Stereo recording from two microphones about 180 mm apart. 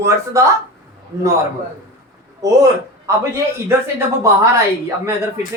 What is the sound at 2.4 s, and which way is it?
A man's voice, 20° right (ahead or behind).